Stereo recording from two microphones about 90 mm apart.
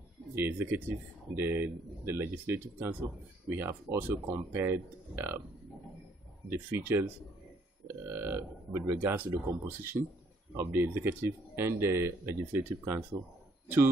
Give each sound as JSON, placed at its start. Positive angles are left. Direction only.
{"t": 0.4, "sound": "speech", "side_deg": -25}
{"t": 6.7, "sound": "speech", "side_deg": -25}